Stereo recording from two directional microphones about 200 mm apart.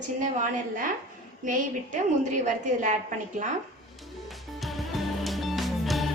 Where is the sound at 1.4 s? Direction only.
40° right (ahead or behind).